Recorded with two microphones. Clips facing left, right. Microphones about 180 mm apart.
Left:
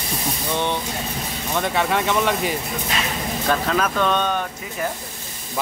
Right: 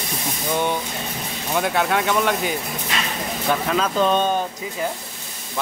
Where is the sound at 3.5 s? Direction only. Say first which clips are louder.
Even; 15° right (ahead or behind).